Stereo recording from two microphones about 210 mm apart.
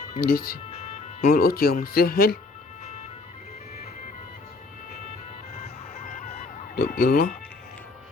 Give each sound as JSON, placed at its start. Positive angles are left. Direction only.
{"t": 0.2, "sound": "speech", "side_deg": 45}
{"t": 6.7, "sound": "emergency vehicle", "side_deg": 45}